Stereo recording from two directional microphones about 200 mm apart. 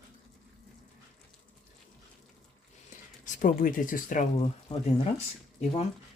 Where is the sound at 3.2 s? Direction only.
45° left (ahead or behind).